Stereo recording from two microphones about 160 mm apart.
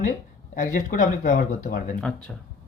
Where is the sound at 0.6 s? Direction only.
55° left (ahead or behind).